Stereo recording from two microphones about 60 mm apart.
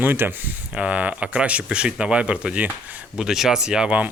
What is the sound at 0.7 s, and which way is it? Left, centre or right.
Speech, right.